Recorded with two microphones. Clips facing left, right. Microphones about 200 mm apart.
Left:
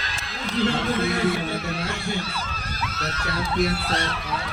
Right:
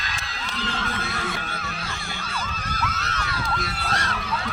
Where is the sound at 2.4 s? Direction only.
35° left (ahead or behind).